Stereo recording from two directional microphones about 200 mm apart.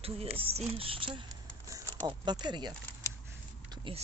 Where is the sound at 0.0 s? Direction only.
30° right (ahead or behind).